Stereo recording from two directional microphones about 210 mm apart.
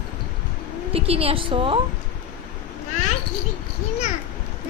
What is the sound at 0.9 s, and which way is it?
Speech, 30° right (ahead or behind).